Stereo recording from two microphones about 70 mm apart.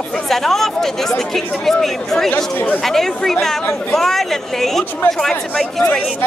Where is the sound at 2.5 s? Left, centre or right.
Left.